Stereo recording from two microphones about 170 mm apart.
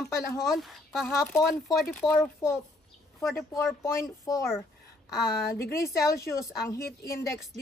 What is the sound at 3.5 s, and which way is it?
Speech, 15° left (ahead or behind).